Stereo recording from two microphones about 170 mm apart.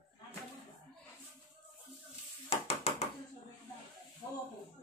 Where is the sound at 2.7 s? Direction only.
35° left (ahead or behind).